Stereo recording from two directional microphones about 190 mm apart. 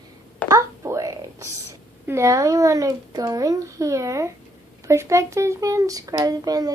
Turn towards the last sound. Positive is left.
turn(degrees=-20)  # may be behind; listen again after turning